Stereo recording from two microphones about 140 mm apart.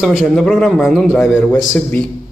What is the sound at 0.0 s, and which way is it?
A man's voice, 5° right (ahead or behind).